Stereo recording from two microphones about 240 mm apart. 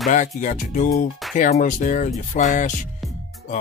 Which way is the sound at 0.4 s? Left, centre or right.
Left.